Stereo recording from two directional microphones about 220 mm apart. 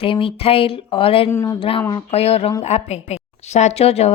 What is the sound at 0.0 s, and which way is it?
A woman's voice, 25° left (ahead or behind).